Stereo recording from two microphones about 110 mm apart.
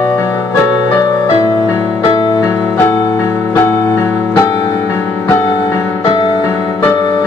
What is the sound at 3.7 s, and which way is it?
Music, 25° left (ahead or behind).